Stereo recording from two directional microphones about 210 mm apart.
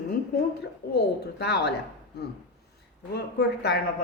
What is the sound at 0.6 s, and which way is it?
A woman's voice, 50° left (ahead or behind).